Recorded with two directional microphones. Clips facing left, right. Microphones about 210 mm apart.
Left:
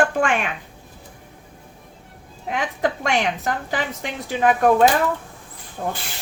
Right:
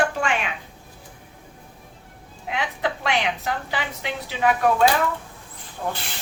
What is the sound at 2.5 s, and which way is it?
A woman's voice, 45° left (ahead or behind).